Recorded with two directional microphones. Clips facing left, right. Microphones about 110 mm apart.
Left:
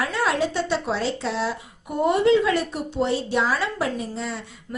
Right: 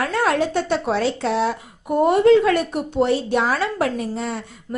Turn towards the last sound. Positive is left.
turn(degrees=-55)  # may be behind; listen again after turning